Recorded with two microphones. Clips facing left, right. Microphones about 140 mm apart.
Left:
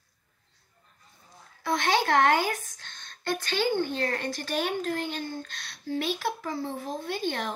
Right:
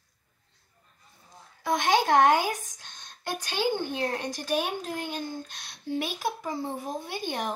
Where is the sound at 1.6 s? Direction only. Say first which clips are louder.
Right 2 dB; 15° right (ahead or behind).